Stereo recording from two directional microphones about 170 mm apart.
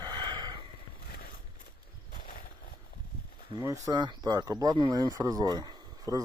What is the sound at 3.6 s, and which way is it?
Speech, 20° right (ahead or behind).